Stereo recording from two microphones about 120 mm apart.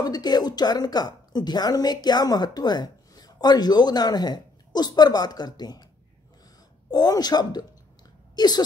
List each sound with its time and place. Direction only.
0.0 s a woman's voice: 35° left (ahead or behind)
6.9 s a woman's voice: 35° left (ahead or behind)